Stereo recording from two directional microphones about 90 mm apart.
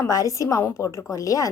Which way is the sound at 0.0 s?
40° left (ahead or behind).